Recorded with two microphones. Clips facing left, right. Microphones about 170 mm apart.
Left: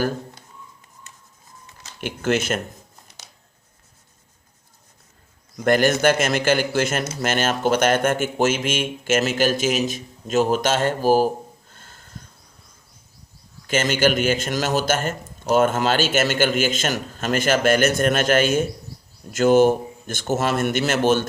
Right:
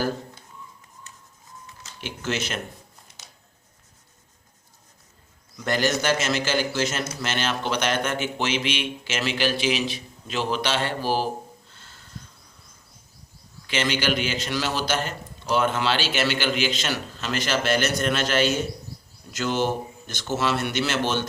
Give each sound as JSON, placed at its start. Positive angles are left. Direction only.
{"t": 2.0, "sound": "a man's voice", "side_deg": 50}
{"t": 5.5, "sound": "a man's voice", "side_deg": 50}
{"t": 11.7, "sound": "a sound", "side_deg": 50}
{"t": 13.7, "sound": "a man's voice", "side_deg": 45}